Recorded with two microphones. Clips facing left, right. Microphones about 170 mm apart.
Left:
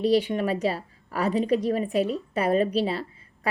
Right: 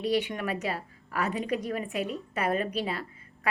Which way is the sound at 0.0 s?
30° left (ahead or behind).